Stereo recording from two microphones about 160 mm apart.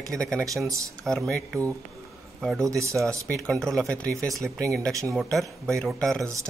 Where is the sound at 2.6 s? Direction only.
20° right (ahead or behind).